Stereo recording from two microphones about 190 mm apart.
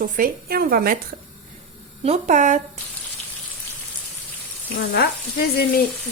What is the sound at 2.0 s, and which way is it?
Speech, 40° right (ahead or behind).